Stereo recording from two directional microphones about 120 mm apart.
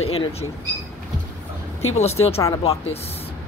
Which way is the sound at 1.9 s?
65° left (ahead or behind).